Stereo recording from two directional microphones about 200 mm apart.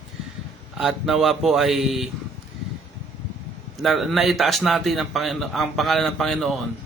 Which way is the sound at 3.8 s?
Centre (ahead or behind).